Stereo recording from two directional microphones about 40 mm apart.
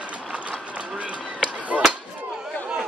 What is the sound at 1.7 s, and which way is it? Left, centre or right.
Chop, centre.